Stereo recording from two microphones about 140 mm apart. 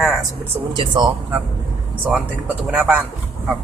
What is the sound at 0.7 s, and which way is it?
Speech, 30° right (ahead or behind).